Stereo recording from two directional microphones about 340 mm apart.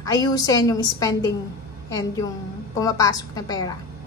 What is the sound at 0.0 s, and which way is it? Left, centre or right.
A woman's voice, centre.